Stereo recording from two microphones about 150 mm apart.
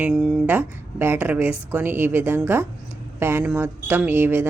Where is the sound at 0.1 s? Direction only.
Centre (ahead or behind).